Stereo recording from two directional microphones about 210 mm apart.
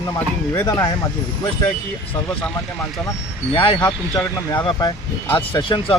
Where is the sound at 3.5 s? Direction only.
25° left (ahead or behind).